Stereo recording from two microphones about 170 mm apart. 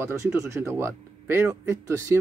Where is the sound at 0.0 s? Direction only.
15° right (ahead or behind).